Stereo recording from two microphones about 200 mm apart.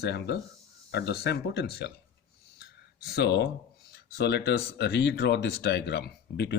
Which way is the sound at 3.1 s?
55° left (ahead or behind).